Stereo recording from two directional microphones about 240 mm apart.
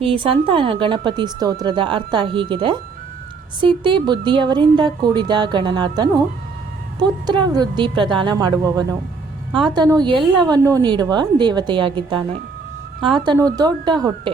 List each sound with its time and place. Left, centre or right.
0.0 s a woman's voice: right
7.3 s a woman's voice: centre